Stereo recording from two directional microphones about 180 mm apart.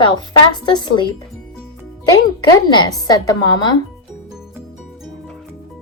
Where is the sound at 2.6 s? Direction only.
25° left (ahead or behind).